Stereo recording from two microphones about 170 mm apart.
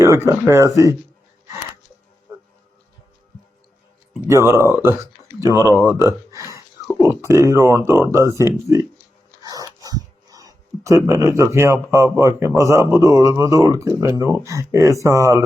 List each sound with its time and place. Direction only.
0.0 s speech: 15° right (ahead or behind)
4.3 s speech: 15° right (ahead or behind)